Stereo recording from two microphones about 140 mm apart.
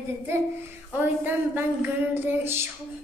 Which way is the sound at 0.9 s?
15° right (ahead or behind).